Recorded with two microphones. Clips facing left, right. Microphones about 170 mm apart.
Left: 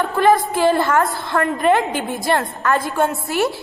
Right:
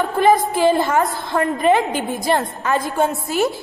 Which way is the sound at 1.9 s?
45° right (ahead or behind).